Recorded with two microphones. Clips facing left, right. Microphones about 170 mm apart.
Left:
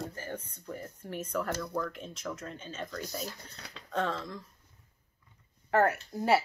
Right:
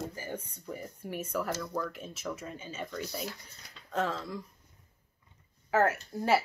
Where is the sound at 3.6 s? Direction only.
75° left (ahead or behind).